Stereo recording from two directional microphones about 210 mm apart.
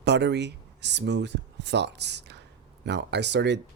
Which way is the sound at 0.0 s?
55° right (ahead or behind).